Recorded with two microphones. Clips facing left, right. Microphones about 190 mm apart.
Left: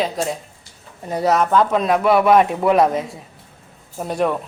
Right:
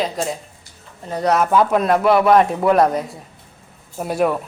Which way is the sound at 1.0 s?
10° left (ahead or behind).